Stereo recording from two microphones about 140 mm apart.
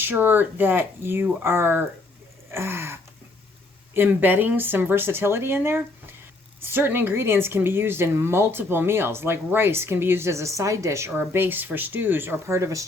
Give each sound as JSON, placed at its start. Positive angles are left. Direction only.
{"t": 0.0, "sound": "a woman's voice", "side_deg": -15}